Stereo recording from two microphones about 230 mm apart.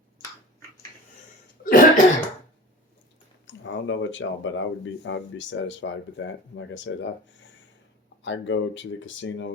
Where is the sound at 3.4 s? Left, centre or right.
Left.